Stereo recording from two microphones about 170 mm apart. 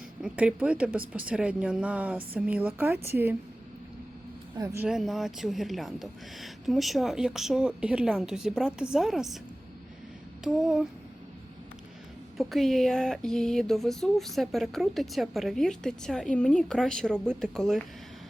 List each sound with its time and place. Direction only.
0.2 s speech: 5° right (ahead or behind)
4.5 s speech: 15° right (ahead or behind)
4.9 s speech: centre (ahead or behind)
10.4 s speech: centre (ahead or behind)
12.4 s speech: centre (ahead or behind)